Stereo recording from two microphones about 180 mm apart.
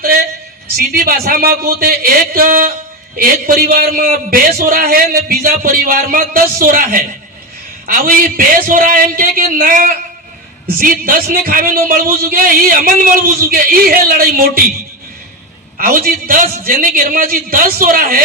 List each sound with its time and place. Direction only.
0.8 s a man's voice: 55° right (ahead or behind)
15.8 s a man's voice: 55° right (ahead or behind)